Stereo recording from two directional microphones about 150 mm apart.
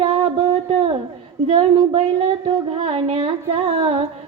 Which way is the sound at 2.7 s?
40° right (ahead or behind).